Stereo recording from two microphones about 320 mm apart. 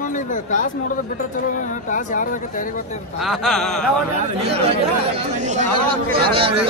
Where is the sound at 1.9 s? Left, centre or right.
Left.